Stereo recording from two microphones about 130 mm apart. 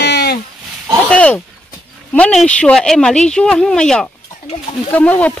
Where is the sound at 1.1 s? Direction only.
10° left (ahead or behind).